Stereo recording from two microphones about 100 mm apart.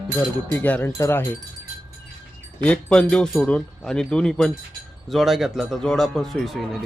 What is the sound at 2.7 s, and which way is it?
A man's voice, 10° left (ahead or behind).